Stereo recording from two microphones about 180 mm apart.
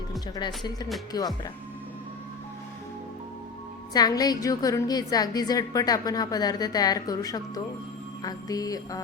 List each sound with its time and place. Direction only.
0.3 s a woman's voice: 25° left (ahead or behind)
3.9 s a woman's voice: 20° left (ahead or behind)